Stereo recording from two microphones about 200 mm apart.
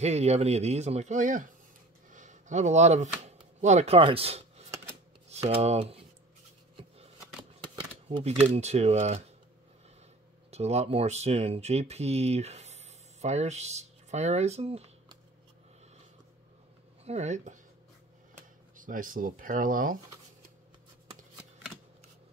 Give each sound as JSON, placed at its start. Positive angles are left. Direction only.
{"t": 0.0, "sound": "speech", "side_deg": -35}
{"t": 8.5, "sound": "speech", "side_deg": -35}
{"t": 10.5, "sound": "speech", "side_deg": -30}
{"t": 17.0, "sound": "speech", "side_deg": -35}
{"t": 18.8, "sound": "speech", "side_deg": -45}